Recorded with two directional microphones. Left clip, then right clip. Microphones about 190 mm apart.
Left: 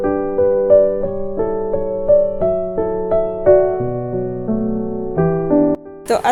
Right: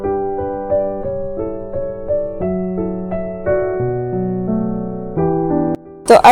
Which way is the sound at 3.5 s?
50° left (ahead or behind).